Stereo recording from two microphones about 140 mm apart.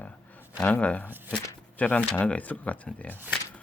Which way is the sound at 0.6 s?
10° left (ahead or behind).